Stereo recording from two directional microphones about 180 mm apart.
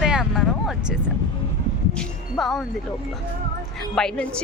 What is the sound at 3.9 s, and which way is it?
Speech, 5° left (ahead or behind).